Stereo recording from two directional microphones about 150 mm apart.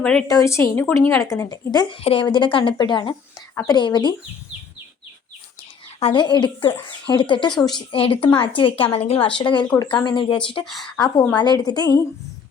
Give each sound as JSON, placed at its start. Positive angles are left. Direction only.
{"t": 0.0, "sound": "a woman's voice", "side_deg": 5}
{"t": 0.3, "sound": "a woman's voice", "side_deg": 20}
{"t": 1.2, "sound": "a woman's voice", "side_deg": 25}
{"t": 2.0, "sound": "speech", "side_deg": 40}
{"t": 3.5, "sound": "speech", "side_deg": 20}
{"t": 3.8, "sound": "a woman's voice", "side_deg": 30}
{"t": 6.0, "sound": "speech", "side_deg": 35}
{"t": 10.7, "sound": "a woman's voice", "side_deg": 0}
{"t": 11.3, "sound": "a woman's voice", "side_deg": 25}